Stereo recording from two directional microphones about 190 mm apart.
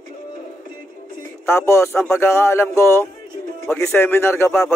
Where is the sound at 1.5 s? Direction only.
15° left (ahead or behind).